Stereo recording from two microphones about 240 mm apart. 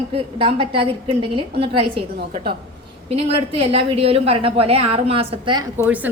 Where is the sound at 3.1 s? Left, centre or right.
Right.